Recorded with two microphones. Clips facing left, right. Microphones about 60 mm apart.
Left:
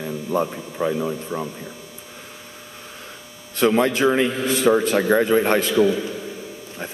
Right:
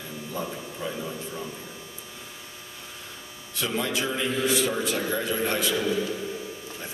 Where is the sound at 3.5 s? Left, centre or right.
Left.